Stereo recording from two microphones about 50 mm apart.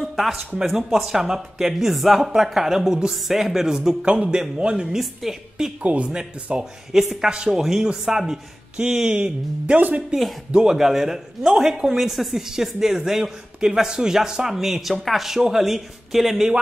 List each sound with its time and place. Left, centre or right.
0.0 s a sound: centre
0.6 s speech: centre
4.0 s speech: right
4.9 s speech: centre
5.8 s speech: right
6.0 s speech: centre
9.8 s speech: right
10.5 s speech: centre